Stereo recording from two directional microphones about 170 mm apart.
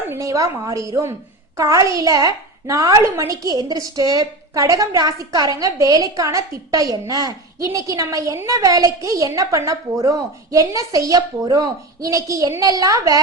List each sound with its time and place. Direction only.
0.1 s a woman's voice: 20° right (ahead or behind)